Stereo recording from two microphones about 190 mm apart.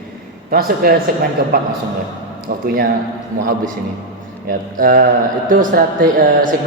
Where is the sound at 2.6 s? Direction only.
50° right (ahead or behind).